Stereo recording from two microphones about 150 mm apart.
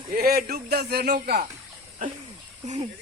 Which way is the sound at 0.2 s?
85° right.